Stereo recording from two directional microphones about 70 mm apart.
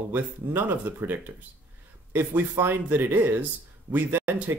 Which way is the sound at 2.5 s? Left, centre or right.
Right.